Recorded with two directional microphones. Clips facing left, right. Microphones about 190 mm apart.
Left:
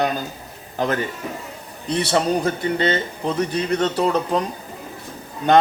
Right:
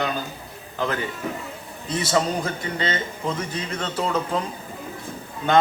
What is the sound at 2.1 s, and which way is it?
A man's voice, 35° left (ahead or behind).